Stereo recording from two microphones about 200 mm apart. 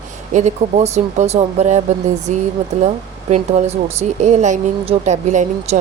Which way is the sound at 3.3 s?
35° right (ahead or behind).